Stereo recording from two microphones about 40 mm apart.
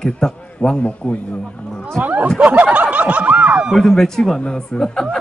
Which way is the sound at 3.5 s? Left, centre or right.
Right.